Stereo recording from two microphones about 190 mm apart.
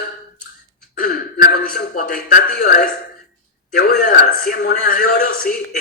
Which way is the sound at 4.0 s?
40° left (ahead or behind).